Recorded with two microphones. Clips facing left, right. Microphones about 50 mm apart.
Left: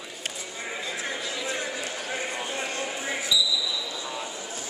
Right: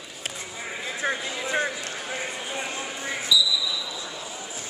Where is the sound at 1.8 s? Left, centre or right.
Centre.